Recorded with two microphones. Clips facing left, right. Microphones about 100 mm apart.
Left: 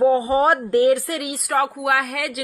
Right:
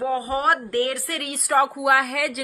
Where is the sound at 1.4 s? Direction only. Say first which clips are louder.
Right 3 dB; centre (ahead or behind).